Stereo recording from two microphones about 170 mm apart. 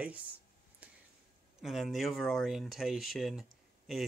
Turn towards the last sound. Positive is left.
turn(degrees=0)  # may be behind; listen again after turning